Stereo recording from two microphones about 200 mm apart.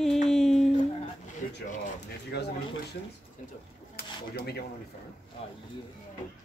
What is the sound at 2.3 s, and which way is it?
Speech, 60° left (ahead or behind).